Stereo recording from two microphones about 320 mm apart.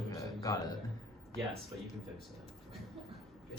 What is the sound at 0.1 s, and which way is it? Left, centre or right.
Music, centre.